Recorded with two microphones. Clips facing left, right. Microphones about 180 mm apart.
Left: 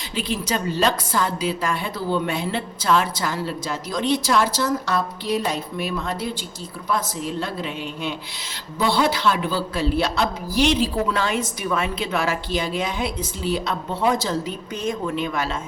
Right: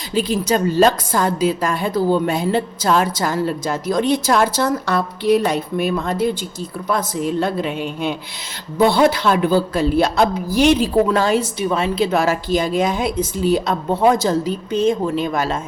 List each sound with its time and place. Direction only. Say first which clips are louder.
0.1 s a woman's voice: right 7 dB; 40° right (ahead or behind)
14.7 s a woman's voice: right 9 dB; 30° right (ahead or behind)